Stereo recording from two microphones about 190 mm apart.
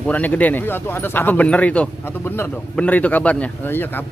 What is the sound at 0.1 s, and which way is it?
A man's voice, 10° left (ahead or behind).